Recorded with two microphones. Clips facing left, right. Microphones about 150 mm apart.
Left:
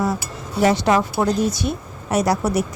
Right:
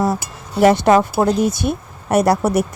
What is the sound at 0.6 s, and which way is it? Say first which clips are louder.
Speech: right 5 dB; 55° right (ahead or behind).